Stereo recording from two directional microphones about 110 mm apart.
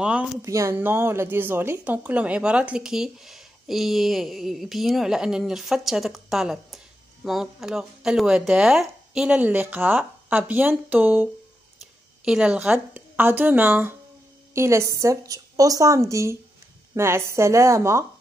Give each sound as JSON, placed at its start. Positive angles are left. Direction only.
{"t": 0.0, "sound": "speech", "side_deg": -10}
{"t": 0.4, "sound": "a woman's voice", "side_deg": -25}
{"t": 12.3, "sound": "a woman's voice", "side_deg": -10}